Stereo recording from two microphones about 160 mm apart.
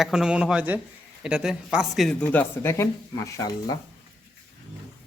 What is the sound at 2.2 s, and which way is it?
A man's voice, 10° left (ahead or behind).